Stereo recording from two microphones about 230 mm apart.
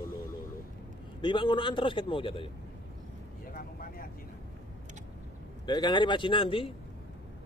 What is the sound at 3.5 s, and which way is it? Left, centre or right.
Vehicle, left.